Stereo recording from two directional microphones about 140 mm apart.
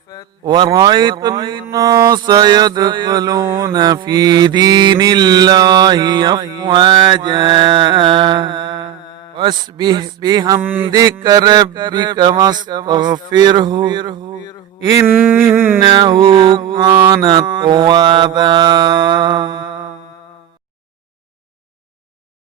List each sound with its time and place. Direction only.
0.4 s mantra: 30° right (ahead or behind)
10.6 s mantra: 15° right (ahead or behind)
10.8 s mantra: 30° right (ahead or behind)
14.9 s mantra: 15° right (ahead or behind)
15.8 s mantra: 35° right (ahead or behind)